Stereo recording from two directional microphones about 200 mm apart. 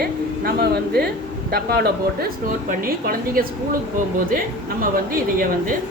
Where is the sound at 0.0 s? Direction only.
50° right (ahead or behind).